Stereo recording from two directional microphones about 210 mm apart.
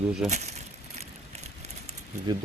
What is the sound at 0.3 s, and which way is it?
Speech, 35° right (ahead or behind).